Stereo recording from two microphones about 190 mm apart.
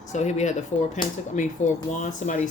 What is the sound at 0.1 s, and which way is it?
Speech, 40° left (ahead or behind).